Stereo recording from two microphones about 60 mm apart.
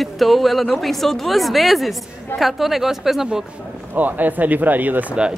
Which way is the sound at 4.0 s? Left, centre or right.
Right.